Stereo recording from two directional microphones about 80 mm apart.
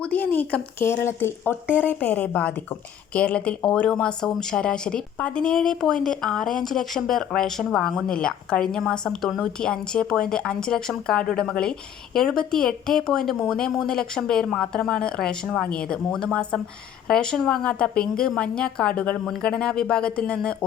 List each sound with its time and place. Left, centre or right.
0.0 s a woman's voice: left